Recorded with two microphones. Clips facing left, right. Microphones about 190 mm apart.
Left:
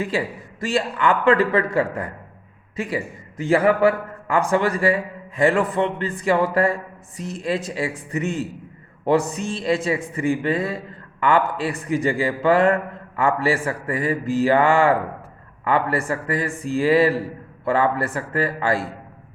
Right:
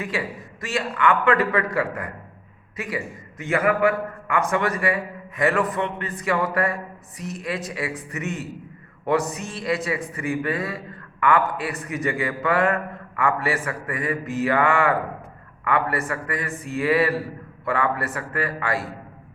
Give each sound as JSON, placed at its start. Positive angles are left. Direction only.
{"t": 0.0, "sound": "a man's voice", "side_deg": 30}